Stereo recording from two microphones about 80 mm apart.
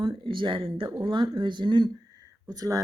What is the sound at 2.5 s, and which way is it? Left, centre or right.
Speech, right.